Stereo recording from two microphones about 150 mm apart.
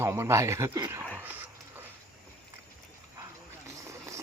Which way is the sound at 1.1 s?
10° right (ahead or behind).